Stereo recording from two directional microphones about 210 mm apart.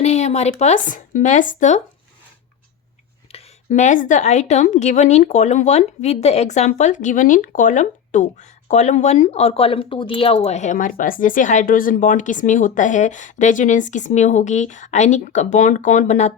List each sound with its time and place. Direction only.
0.0 s speech: 30° left (ahead or behind)
3.3 s a woman's voice: 30° left (ahead or behind)